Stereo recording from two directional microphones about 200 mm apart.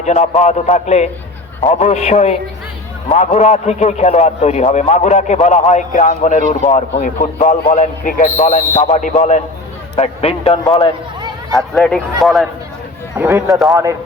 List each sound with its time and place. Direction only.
0.0 s a man's voice: 35° left (ahead or behind)
11.7 s speech: 5° left (ahead or behind)
13.1 s speech: 15° right (ahead or behind)